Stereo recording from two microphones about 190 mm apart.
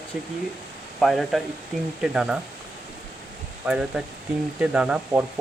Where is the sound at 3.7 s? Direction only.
5° right (ahead or behind).